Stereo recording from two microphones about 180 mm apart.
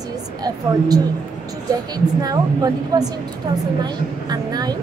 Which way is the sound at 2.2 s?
20° right (ahead or behind).